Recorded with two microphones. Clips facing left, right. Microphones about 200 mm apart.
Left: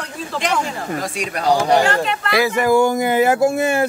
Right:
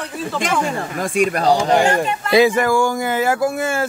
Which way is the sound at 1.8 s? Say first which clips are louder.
Right 1 dB; 20° right (ahead or behind).